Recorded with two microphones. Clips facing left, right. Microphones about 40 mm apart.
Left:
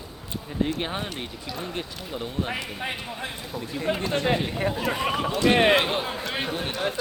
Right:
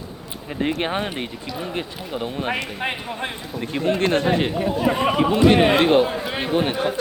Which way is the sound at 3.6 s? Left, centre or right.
Right.